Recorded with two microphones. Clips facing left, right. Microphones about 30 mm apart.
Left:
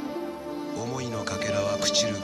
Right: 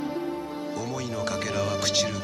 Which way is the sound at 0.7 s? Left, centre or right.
Centre.